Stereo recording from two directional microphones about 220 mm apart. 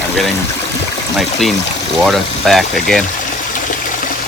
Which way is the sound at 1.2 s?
Centre (ahead or behind).